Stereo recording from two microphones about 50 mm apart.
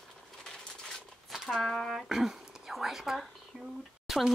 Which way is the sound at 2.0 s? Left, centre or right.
Centre.